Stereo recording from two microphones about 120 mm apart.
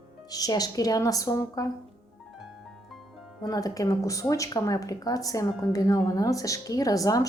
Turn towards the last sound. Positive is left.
turn(degrees=30)  # may be behind; listen again after turning